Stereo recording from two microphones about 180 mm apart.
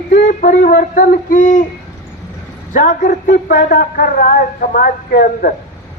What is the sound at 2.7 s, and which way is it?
Speech, 50° left (ahead or behind).